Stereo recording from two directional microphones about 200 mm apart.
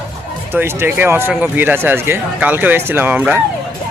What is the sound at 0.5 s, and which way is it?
Speech, 10° right (ahead or behind).